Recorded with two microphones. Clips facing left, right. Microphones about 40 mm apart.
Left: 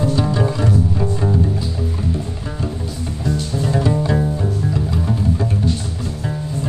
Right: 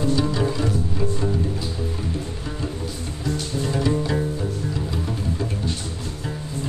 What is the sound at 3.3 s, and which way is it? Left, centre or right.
Music, centre.